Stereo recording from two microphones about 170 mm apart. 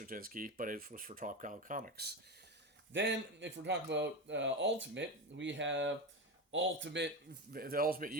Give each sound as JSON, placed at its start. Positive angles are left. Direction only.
{"t": 0.0, "sound": "speech", "side_deg": -55}
{"t": 2.9, "sound": "speech", "side_deg": -90}
{"t": 7.5, "sound": "a man's voice", "side_deg": -60}